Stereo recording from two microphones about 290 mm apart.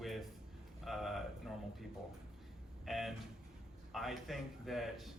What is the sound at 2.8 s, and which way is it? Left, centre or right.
Speech, centre.